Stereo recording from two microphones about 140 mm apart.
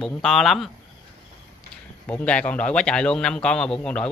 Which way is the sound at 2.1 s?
10° left (ahead or behind).